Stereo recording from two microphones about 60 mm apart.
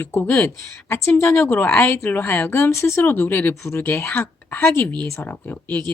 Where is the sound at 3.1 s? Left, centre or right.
Left.